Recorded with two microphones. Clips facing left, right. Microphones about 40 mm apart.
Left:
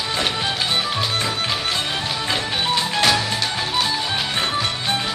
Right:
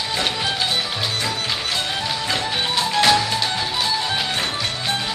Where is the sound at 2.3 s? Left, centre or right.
Centre.